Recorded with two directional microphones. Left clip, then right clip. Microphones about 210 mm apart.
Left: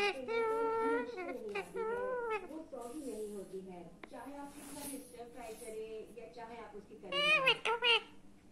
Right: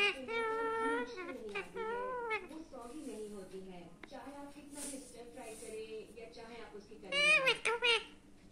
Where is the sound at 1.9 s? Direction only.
20° right (ahead or behind).